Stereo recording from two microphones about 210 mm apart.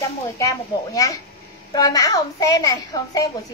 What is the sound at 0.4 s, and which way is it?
A child's voice, 15° left (ahead or behind).